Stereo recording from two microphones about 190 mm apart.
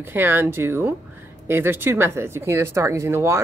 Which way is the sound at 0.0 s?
10° right (ahead or behind).